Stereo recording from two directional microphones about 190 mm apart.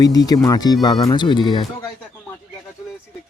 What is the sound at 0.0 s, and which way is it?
Speech, 20° left (ahead or behind).